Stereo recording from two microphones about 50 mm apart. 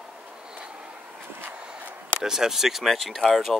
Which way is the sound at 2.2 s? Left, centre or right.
Centre.